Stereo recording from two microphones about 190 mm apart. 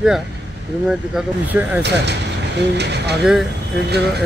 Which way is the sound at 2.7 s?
60° right (ahead or behind).